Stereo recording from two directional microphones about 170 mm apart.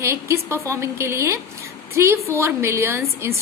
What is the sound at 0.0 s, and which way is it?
A woman's voice, 15° right (ahead or behind).